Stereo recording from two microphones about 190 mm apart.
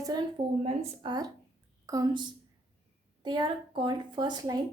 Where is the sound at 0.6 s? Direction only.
30° right (ahead or behind).